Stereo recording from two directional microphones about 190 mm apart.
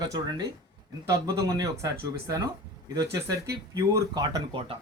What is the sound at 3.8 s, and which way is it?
Speech, 15° right (ahead or behind).